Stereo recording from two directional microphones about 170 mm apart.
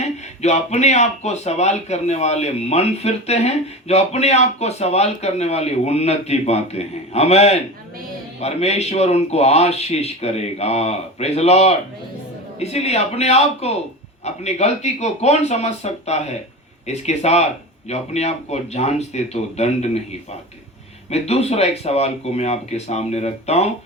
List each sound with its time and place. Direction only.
0.0 s speech: 40° left (ahead or behind)
21.1 s speech: 40° left (ahead or behind)